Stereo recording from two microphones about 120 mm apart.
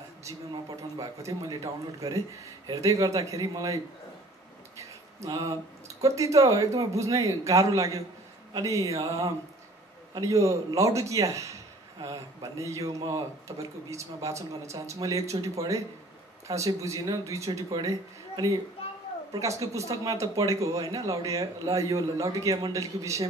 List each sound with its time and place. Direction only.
0.5 s a man's voice: 35° right (ahead or behind)
4.7 s a sound: 30° right (ahead or behind)
5.9 s a man's voice: 25° right (ahead or behind)